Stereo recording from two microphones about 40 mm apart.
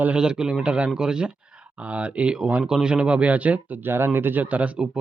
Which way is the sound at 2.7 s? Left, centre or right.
Right.